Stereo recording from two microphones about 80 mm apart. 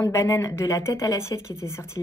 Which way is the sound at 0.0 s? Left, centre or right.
Left.